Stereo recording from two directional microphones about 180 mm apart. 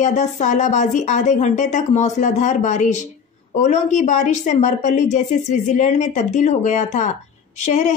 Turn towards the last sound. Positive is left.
turn(degrees=40)  # may be behind; listen again after turning